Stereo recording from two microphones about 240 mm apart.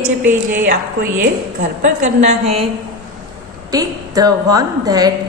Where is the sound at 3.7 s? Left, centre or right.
Centre.